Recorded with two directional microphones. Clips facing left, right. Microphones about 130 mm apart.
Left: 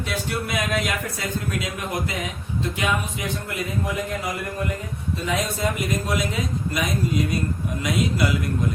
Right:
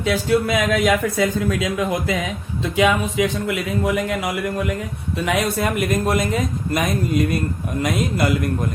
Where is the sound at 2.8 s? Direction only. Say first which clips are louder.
Right 11 dB; 90° right; by 8.5 s 50° right (ahead or behind).